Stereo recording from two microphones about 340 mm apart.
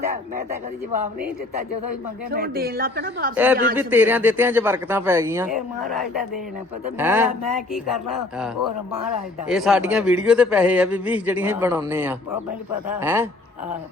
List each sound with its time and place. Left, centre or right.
2.3 s speech: right
3.3 s speech: centre
9.5 s speech: centre